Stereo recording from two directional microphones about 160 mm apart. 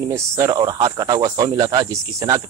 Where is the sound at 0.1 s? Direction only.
20° right (ahead or behind).